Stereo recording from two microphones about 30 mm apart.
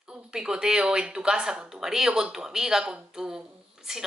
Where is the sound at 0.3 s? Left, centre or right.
Right.